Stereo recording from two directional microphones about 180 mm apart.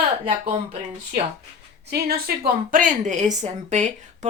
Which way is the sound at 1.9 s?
60° right (ahead or behind).